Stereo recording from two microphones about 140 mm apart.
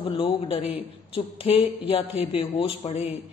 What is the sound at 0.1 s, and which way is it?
A woman's voice, 40° left (ahead or behind).